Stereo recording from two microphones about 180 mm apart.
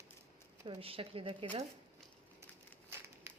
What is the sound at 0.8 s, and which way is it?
Speech, 30° right (ahead or behind).